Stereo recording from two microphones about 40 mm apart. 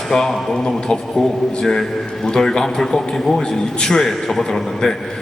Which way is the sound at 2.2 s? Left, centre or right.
Centre.